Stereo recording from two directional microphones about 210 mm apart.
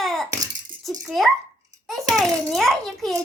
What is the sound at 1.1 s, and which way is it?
Speech, centre (ahead or behind).